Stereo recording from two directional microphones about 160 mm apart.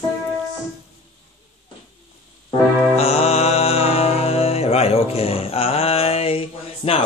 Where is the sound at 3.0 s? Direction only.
40° left (ahead or behind).